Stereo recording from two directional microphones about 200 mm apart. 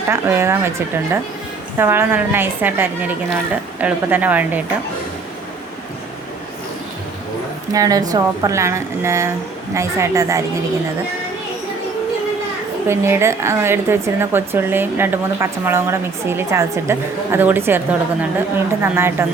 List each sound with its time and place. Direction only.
0.1 s speech: 15° right (ahead or behind)
1.8 s speech: 10° right (ahead or behind)
7.7 s speech: 15° right (ahead or behind)
12.9 s speech: 10° right (ahead or behind)